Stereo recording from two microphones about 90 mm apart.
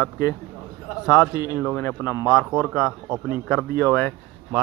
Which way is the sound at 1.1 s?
40° left (ahead or behind).